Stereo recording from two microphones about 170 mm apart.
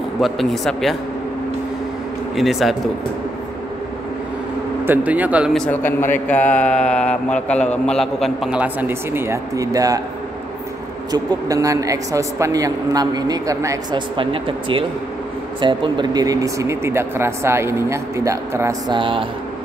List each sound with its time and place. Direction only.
0.2 s speech: centre (ahead or behind)
2.3 s speech: centre (ahead or behind)
4.8 s a man's voice: 10° right (ahead or behind)
5.5 s speech: 5° left (ahead or behind); by 10.0 s 20° right (ahead or behind)
11.1 s speech: 20° right (ahead or behind)
14.1 s speech: 30° right (ahead or behind)